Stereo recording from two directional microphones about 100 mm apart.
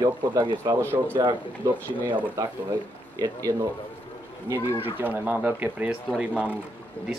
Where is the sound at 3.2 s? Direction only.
35° right (ahead or behind).